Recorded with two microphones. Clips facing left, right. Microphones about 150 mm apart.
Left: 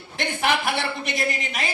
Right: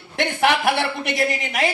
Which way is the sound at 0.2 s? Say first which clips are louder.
Right 4 dB; 65° right (ahead or behind).